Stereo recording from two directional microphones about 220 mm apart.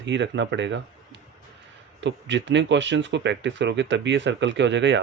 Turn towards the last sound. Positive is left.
turn(degrees=-55)  # may be behind; listen again after turning